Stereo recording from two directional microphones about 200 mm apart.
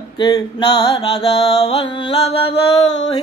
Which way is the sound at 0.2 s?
20° left (ahead or behind).